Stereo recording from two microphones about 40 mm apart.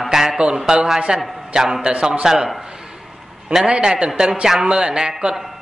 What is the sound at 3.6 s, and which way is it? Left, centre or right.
Speech, right.